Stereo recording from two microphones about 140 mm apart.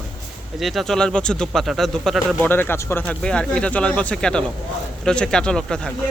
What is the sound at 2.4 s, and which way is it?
Speech, 15° left (ahead or behind).